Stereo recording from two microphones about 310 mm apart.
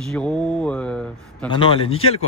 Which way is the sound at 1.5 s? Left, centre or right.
Centre.